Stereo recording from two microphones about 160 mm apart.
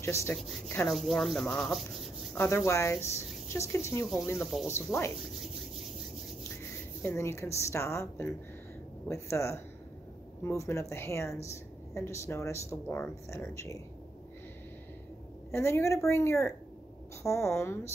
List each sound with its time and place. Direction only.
0.0 s speech: 15° left (ahead or behind)
0.8 s speech: centre (ahead or behind); by 5.1 s 15° left (ahead or behind)
7.0 s speech: 15° left (ahead or behind)
15.5 s speech: 15° left (ahead or behind)